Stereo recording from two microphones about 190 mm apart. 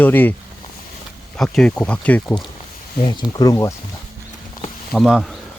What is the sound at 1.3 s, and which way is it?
Speech, 5° left (ahead or behind).